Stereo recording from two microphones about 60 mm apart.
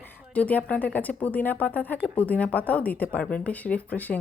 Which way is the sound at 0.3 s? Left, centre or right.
Left.